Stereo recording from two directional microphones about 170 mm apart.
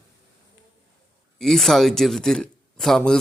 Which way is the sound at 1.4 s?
Centre (ahead or behind).